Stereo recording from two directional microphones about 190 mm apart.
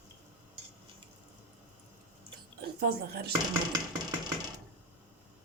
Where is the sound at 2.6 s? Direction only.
55° right (ahead or behind).